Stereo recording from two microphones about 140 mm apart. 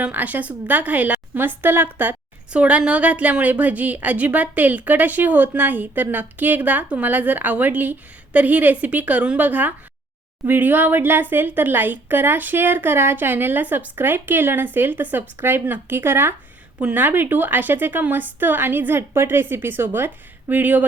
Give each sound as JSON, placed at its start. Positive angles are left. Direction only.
{"t": 0.0, "sound": "a woman's voice", "side_deg": -10}